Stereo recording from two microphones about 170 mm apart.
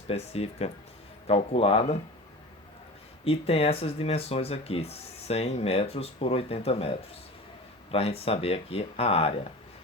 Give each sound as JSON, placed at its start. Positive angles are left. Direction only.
{"t": 0.1, "sound": "speech", "side_deg": 35}
{"t": 3.2, "sound": "speech", "side_deg": 35}